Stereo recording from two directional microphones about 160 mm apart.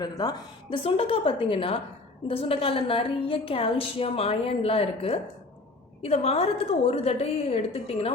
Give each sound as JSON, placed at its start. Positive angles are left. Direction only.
{"t": 0.0, "sound": "a woman's voice", "side_deg": 25}